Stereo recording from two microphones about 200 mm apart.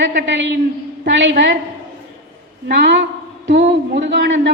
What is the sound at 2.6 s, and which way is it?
Speech, 60° right (ahead or behind).